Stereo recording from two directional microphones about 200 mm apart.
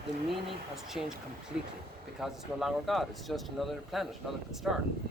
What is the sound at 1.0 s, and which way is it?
Speech, 5° right (ahead or behind).